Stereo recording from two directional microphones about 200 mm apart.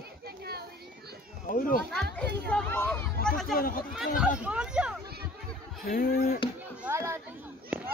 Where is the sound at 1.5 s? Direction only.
45° left (ahead or behind).